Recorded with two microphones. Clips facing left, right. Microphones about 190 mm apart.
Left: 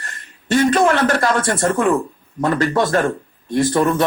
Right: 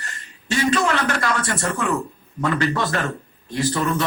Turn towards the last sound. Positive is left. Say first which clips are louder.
# left 6 dB
turn(degrees=50)  # may be behind; listen again after turning